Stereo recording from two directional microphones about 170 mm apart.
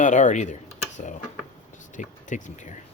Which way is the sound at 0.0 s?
45° left (ahead or behind).